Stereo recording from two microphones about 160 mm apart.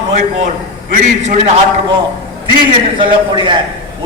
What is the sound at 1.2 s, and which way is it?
Speech, 45° right (ahead or behind).